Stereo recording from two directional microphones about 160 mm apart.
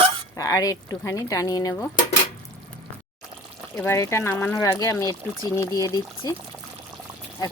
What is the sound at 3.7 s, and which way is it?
Speech, 15° left (ahead or behind).